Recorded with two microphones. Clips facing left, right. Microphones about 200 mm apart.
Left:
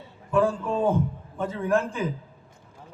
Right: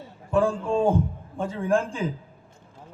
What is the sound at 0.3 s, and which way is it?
A man's voice, 30° right (ahead or behind).